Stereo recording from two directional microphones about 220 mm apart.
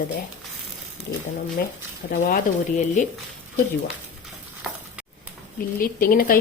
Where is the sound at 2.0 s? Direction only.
35° left (ahead or behind).